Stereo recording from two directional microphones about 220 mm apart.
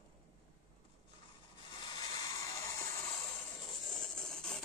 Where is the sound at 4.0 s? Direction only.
5° left (ahead or behind).